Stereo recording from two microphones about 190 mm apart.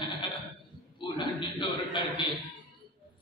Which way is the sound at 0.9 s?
25° left (ahead or behind).